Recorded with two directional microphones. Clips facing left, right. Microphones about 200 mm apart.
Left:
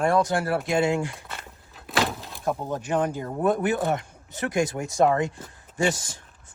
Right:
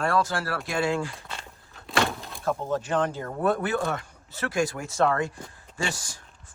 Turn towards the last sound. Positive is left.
turn(degrees=20)  # may be behind; listen again after turning